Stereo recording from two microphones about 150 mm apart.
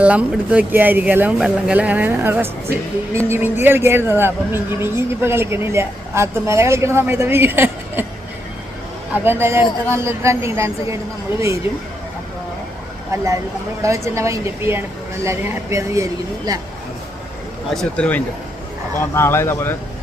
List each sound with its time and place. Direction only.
0.0 s speech: 10° right (ahead or behind)
9.2 s a woman's voice: 15° right (ahead or behind)
13.8 s a woman's voice: 20° right (ahead or behind)
17.7 s speech: 5° left (ahead or behind)